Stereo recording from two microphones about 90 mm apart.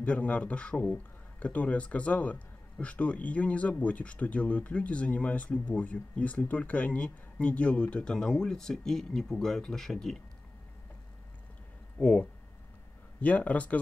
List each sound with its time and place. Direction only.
0.0 s speech: 15° left (ahead or behind)
12.0 s speech: 10° left (ahead or behind)